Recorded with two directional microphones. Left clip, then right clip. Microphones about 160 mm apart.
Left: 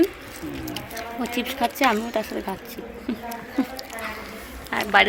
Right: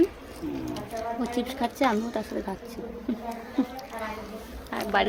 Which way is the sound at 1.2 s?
10° left (ahead or behind).